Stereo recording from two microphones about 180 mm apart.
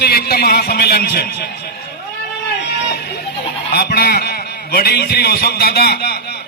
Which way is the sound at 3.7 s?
60° left (ahead or behind).